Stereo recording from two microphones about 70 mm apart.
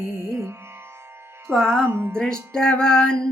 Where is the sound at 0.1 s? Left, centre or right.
Right.